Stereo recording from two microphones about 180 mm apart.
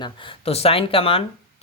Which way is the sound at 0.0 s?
30° left (ahead or behind).